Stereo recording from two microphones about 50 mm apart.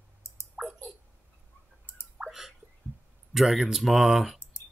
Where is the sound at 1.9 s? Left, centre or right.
Left.